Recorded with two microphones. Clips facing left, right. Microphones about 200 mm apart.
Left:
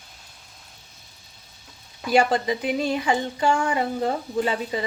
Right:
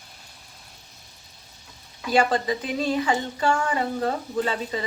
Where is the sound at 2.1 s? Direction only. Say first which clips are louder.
Left 1 dB; 15° left (ahead or behind).